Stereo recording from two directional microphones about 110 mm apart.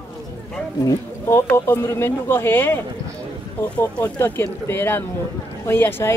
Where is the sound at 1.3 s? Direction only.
20° left (ahead or behind).